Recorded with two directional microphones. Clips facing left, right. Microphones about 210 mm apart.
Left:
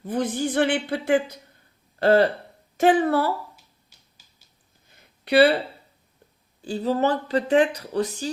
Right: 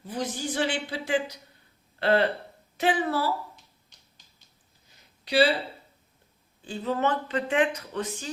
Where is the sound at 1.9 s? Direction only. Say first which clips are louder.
Left 5 dB; 40° left (ahead or behind); by 3.3 s 60° left (ahead or behind).